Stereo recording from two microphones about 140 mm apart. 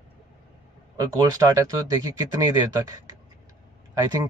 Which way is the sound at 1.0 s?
25° right (ahead or behind).